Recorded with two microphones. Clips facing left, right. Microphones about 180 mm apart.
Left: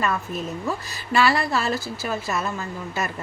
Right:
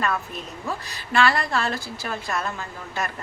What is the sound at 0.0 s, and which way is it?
A woman's voice, centre (ahead or behind).